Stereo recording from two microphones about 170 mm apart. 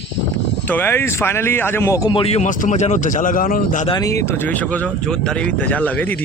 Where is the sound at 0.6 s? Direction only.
10° left (ahead or behind).